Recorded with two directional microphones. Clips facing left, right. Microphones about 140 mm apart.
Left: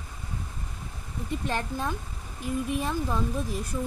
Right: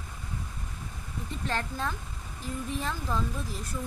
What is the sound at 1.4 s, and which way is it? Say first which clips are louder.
A woman's voice: even; 15° left (ahead or behind).